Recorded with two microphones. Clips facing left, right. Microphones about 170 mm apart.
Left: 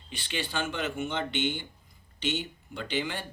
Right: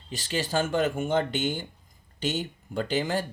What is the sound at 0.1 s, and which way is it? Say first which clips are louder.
Speech: right 6 dB; 40° right (ahead or behind).